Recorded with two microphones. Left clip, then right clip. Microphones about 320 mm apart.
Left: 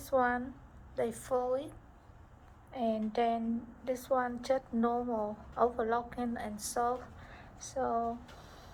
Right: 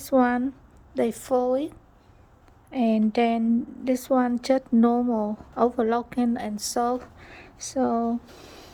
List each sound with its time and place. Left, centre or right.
0.0 s a woman's voice: right